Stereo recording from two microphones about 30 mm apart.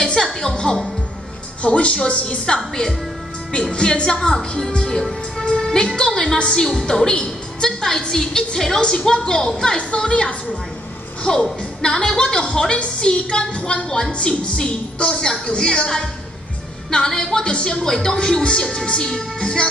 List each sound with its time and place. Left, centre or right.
0.0 s music: left
1.6 s a woman's voice: left
2.4 s a woman's voice: left
4.2 s a woman's voice: centre; by 11.4 s left
11.8 s a woman's voice: left
16.9 s speech: left
17.8 s speech: centre
18.1 s speech: left
19.4 s a woman's voice: left